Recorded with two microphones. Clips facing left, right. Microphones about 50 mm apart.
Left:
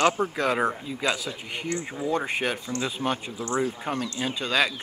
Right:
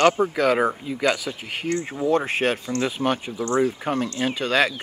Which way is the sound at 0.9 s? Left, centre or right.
Right.